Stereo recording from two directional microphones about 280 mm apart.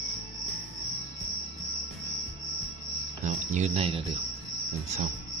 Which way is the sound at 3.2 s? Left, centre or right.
Right.